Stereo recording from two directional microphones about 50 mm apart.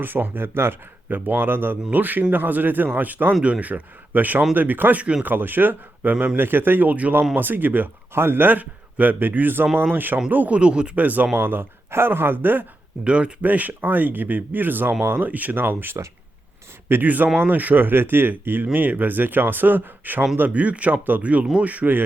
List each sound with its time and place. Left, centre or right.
0.0 s speech: right
8.1 s speech: right
10.6 s speech: centre
10.9 s speech: right
11.3 s speech: right
13.1 s speech: right
13.4 s speech: right